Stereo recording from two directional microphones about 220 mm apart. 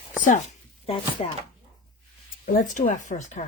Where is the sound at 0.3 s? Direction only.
30° left (ahead or behind).